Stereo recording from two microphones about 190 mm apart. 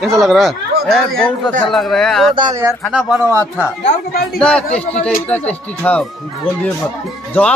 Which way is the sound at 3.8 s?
55° left (ahead or behind).